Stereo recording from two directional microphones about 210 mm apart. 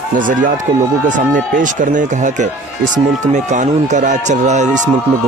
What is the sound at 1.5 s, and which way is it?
Speech, 40° right (ahead or behind).